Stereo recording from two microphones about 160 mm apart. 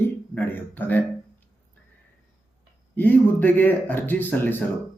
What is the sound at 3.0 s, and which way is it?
Speech, 10° left (ahead or behind).